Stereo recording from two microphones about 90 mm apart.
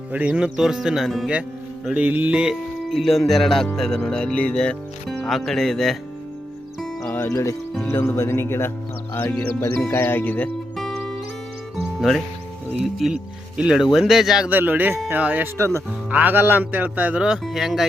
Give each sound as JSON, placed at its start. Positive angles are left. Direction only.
{"t": 0.1, "sound": "speech", "side_deg": -15}
{"t": 1.9, "sound": "speech", "side_deg": -15}
{"t": 2.9, "sound": "speech", "side_deg": 0}
{"t": 7.1, "sound": "music", "side_deg": 25}
{"t": 7.9, "sound": "speech", "side_deg": 25}
{"t": 11.9, "sound": "speech", "side_deg": 0}
{"t": 14.5, "sound": "speech", "side_deg": -20}
{"t": 15.5, "sound": "speech", "side_deg": -35}
{"t": 15.9, "sound": "speech", "side_deg": -15}